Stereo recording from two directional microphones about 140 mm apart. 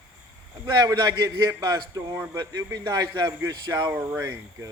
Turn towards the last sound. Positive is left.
turn(degrees=-20)  # may be behind; listen again after turning